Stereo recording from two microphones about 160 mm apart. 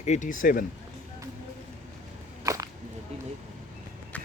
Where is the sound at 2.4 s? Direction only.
20° right (ahead or behind).